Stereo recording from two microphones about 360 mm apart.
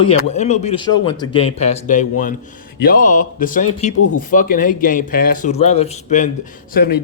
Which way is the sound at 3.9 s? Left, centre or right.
Left.